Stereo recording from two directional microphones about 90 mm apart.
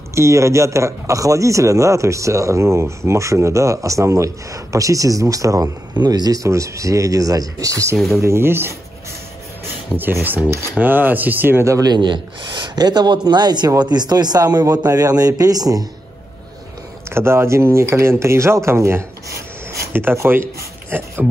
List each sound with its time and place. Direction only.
0.1 s a man's voice: 35° right (ahead or behind)
5.9 s a man's voice: 50° right (ahead or behind); by 8.7 s 25° right (ahead or behind)
9.9 s speech: 20° right (ahead or behind)
11.9 s speech: 60° right (ahead or behind)
17.1 s speech: 30° right (ahead or behind)